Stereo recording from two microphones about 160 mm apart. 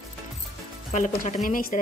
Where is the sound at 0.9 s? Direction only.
55° left (ahead or behind).